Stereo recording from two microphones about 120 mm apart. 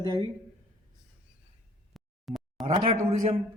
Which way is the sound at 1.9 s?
Centre (ahead or behind).